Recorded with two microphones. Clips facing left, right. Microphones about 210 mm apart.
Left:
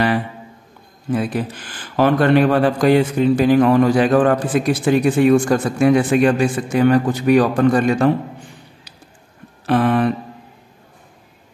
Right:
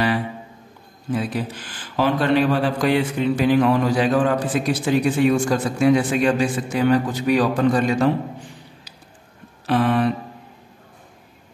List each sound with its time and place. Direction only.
1.1 s a man's voice: 55° left (ahead or behind)
9.7 s a man's voice: 50° left (ahead or behind)